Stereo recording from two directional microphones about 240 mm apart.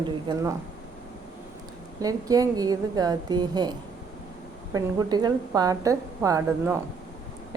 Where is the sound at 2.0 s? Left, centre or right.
Centre.